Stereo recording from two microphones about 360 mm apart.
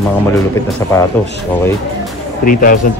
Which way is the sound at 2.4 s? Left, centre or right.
Left.